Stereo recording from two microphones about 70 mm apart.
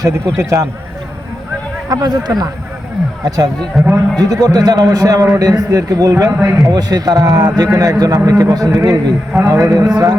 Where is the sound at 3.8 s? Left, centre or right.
Centre.